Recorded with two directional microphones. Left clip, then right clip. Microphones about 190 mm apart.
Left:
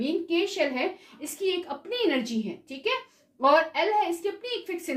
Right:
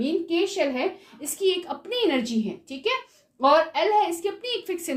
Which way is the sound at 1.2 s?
35° right (ahead or behind).